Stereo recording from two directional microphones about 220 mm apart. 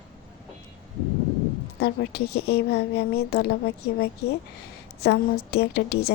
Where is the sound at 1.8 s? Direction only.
45° left (ahead or behind).